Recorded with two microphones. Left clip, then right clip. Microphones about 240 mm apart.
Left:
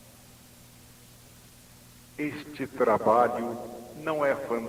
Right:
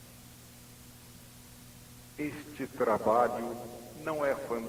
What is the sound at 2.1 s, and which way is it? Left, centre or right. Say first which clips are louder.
A man's voice: left 4 dB; right.